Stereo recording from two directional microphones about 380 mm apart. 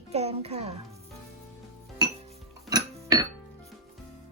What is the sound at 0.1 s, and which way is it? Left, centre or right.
Speech, centre.